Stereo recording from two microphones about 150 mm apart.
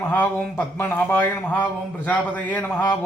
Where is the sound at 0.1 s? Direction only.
10° left (ahead or behind).